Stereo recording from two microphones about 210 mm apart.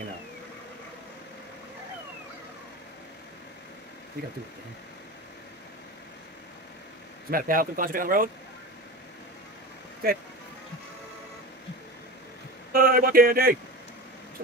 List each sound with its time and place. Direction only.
7.2 s speech: 40° right (ahead or behind)
10.0 s speech: 45° right (ahead or behind)
12.7 s speech: 45° right (ahead or behind)